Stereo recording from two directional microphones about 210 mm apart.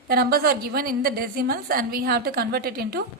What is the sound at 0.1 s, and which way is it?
A woman's voice, 45° right (ahead or behind).